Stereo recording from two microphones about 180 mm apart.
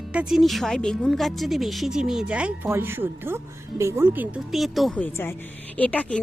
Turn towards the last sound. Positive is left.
turn(degrees=10)  # may be behind; listen again after turning